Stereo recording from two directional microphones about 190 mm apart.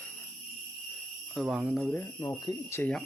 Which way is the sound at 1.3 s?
Centre (ahead or behind).